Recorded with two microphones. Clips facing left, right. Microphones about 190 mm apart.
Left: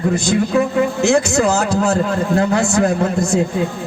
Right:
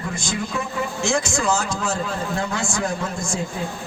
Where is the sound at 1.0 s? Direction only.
65° left (ahead or behind).